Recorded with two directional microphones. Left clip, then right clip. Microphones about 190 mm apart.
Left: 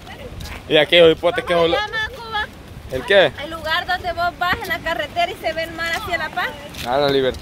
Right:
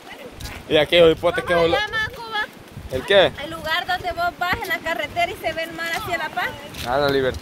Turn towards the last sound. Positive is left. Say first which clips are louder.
# left 2 dB
turn(degrees=5)  # may be behind; listen again after turning